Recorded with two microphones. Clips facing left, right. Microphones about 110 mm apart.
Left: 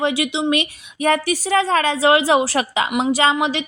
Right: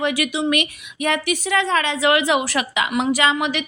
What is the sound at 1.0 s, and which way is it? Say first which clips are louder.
A woman's voice: left 3 dB; 35° left (ahead or behind).